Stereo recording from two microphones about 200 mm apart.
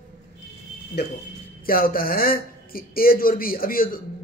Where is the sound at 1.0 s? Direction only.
55° left (ahead or behind).